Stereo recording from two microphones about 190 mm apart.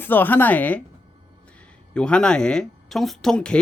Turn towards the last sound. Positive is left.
turn(degrees=5)  # may be behind; listen again after turning